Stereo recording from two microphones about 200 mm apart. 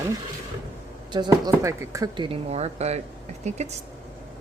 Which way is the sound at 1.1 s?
20° right (ahead or behind).